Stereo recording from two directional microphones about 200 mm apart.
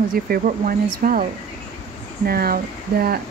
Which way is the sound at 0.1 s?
45° right (ahead or behind).